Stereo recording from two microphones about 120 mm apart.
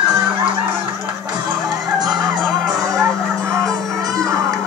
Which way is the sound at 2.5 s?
Centre (ahead or behind).